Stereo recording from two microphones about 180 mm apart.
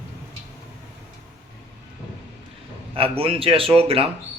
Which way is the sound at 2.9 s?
30° right (ahead or behind).